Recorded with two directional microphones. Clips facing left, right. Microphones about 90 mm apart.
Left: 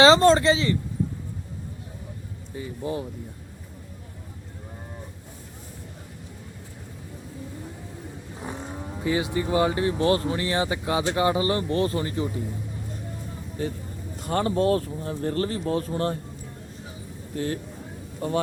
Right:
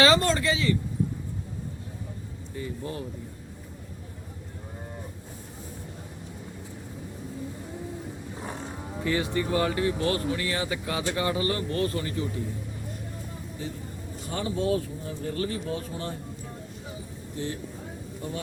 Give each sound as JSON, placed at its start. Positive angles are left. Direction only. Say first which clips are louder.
{"t": 0.0, "sound": "speech", "louder": "left 6 dB", "side_deg": 25}
{"t": 2.6, "sound": "speech", "louder": "left 4 dB", "side_deg": 20}
{"t": 8.6, "sound": "speech", "louder": "left 3 dB", "side_deg": 15}
{"t": 13.6, "sound": "speech", "louder": "left 7 dB", "side_deg": 55}
{"t": 17.3, "sound": "speech", "louder": "left 5 dB", "side_deg": 60}